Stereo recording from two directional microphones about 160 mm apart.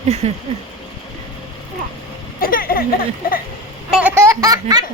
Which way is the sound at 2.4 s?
65° left (ahead or behind).